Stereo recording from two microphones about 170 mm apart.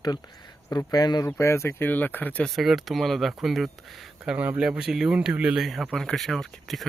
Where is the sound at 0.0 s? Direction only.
25° left (ahead or behind).